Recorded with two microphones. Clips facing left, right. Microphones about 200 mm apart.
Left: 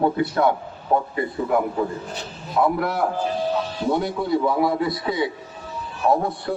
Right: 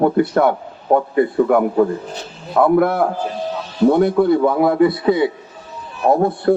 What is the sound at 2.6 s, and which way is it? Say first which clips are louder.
A man's voice: right 8 dB; 55° right (ahead or behind).